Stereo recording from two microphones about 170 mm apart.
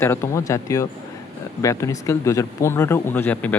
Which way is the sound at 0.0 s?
15° left (ahead or behind).